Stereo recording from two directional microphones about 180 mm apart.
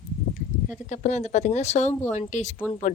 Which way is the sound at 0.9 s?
40° left (ahead or behind).